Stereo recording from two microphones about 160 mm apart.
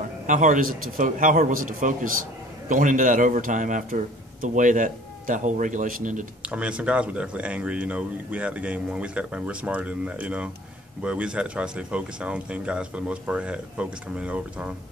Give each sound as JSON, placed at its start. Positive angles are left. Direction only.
{"t": 0.3, "sound": "a man's voice", "side_deg": -50}
{"t": 6.5, "sound": "speech", "side_deg": -5}